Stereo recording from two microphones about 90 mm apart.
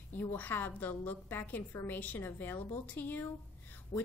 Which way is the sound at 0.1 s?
20° left (ahead or behind).